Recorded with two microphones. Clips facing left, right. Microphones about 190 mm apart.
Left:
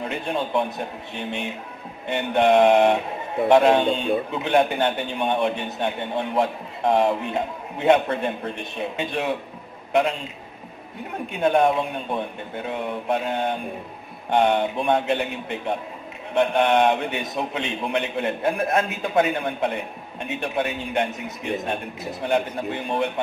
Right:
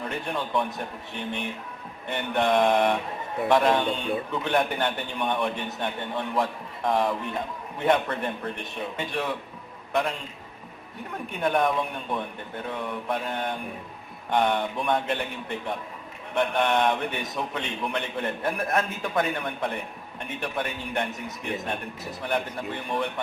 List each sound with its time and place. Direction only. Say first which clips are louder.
0.0 s a man's voice: left 4 dB; 25° left (ahead or behind)
2.1 s a man's voice: left 6 dB; 25° left (ahead or behind)
11.4 s a man's voice: left 5 dB; 25° left (ahead or behind)